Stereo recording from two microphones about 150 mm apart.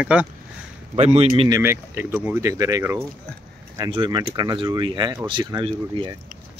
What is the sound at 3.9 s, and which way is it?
Speech, 30° right (ahead or behind).